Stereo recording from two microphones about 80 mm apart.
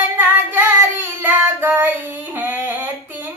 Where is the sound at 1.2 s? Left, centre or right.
Right.